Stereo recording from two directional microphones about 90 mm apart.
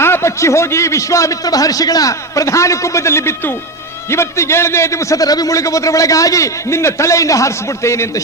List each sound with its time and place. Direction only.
0.0 s a man's voice: 30° left (ahead or behind)